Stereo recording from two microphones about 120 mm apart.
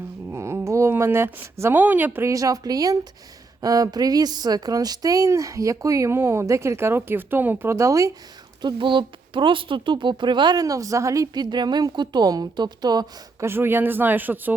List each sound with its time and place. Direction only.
0.3 s speech: 25° right (ahead or behind)
8.6 s speech: 40° right (ahead or behind)
13.4 s speech: 20° right (ahead or behind)